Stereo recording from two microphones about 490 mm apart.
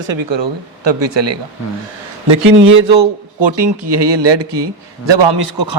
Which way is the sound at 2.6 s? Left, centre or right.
Right.